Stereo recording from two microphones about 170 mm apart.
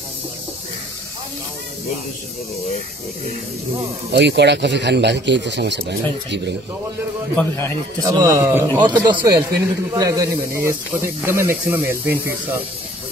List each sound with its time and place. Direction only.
4.1 s speech: 90° right
7.3 s a man's voice: 15° left (ahead or behind)
8.1 s a man's voice: 20° right (ahead or behind)